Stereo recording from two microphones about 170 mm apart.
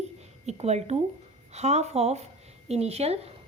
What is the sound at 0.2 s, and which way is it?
A woman's voice, 40° right (ahead or behind).